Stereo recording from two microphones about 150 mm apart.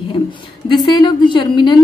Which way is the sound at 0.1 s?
35° left (ahead or behind).